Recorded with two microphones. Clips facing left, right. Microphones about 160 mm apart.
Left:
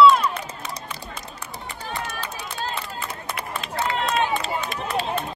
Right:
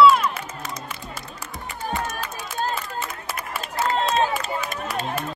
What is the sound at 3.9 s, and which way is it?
Run, 35° right (ahead or behind).